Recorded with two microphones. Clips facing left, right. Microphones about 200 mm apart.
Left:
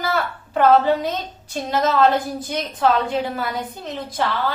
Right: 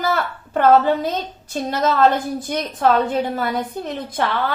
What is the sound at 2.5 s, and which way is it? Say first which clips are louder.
A woman's voice: right 1 dB; 55° right (ahead or behind).